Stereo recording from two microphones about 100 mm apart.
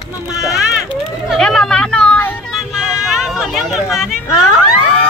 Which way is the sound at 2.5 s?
5° right (ahead or behind).